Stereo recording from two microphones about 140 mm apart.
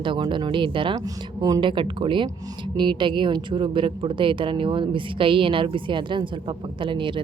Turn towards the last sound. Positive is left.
turn(degrees=-35)  # may be behind; listen again after turning